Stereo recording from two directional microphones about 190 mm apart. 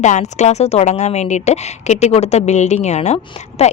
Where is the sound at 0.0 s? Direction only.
35° left (ahead or behind).